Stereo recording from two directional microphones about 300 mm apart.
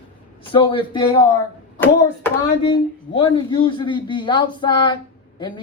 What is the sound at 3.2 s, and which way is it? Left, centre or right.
Speech, centre.